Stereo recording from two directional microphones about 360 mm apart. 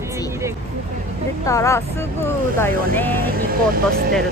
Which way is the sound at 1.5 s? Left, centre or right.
Centre.